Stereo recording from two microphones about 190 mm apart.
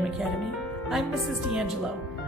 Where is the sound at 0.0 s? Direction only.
Centre (ahead or behind).